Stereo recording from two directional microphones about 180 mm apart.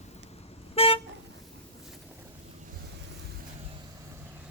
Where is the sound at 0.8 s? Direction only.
35° left (ahead or behind).